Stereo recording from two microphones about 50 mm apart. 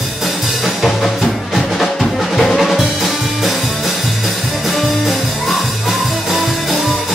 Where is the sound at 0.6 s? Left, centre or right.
Centre.